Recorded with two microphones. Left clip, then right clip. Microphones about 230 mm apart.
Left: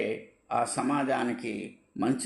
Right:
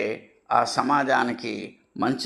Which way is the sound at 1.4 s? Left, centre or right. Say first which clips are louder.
Right 4 dB; right.